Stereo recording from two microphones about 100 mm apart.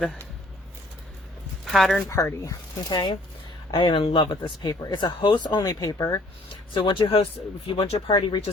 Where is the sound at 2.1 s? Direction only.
30° left (ahead or behind).